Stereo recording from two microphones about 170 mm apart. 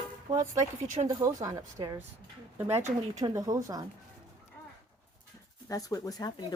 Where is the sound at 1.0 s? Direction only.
20° right (ahead or behind).